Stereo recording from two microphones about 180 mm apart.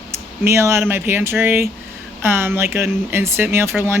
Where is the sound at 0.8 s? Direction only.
10° right (ahead or behind).